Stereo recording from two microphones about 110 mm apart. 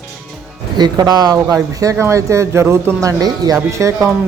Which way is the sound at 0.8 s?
40° right (ahead or behind).